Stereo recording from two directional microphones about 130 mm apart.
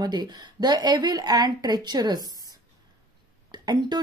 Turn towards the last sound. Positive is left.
turn(degrees=-35)  # may be behind; listen again after turning